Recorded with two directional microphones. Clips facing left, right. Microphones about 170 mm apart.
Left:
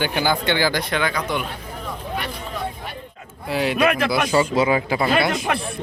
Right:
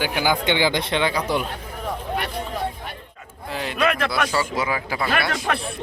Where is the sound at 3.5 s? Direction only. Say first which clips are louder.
Left 4 dB; 10° left (ahead or behind).